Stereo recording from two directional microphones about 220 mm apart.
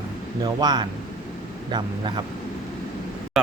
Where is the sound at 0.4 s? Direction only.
20° right (ahead or behind).